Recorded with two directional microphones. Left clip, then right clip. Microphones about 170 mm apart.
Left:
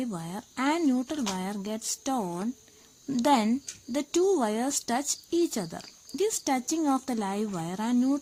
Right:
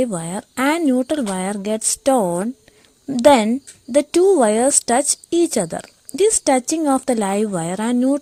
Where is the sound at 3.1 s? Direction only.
35° right (ahead or behind).